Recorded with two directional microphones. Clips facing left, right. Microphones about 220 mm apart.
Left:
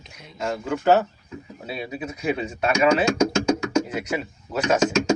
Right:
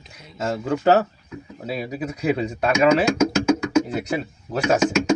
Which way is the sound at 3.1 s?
5° right (ahead or behind).